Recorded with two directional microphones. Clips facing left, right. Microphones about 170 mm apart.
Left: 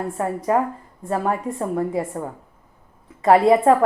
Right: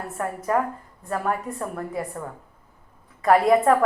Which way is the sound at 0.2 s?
25° left (ahead or behind).